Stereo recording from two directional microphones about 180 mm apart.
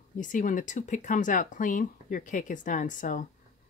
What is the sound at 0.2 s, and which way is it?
Speech, 45° left (ahead or behind).